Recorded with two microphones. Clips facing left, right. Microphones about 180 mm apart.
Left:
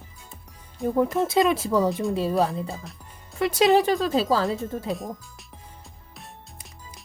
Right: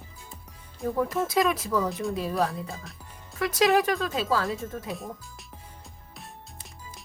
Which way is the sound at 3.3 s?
25° left (ahead or behind).